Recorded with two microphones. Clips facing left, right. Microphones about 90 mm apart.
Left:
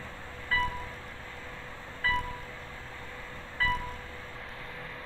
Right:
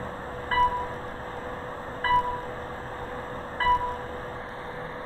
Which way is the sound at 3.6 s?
40° right (ahead or behind).